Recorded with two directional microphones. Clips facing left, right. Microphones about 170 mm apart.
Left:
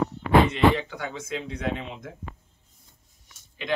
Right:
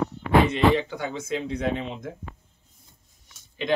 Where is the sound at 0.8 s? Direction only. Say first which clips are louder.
Right 4 dB; 25° right (ahead or behind).